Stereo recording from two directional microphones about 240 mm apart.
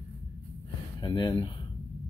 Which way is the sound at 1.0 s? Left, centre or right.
Centre.